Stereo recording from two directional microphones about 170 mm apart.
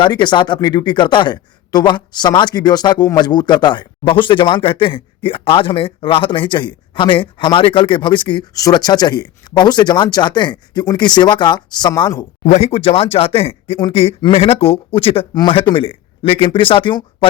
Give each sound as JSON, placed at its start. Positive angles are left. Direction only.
{"t": 0.0, "sound": "speech", "side_deg": 25}
{"t": 12.5, "sound": "speech", "side_deg": 40}